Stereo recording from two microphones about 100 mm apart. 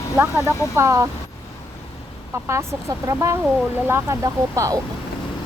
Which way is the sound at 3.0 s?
30° right (ahead or behind).